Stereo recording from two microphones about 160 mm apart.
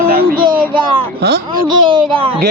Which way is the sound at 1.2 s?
90° right.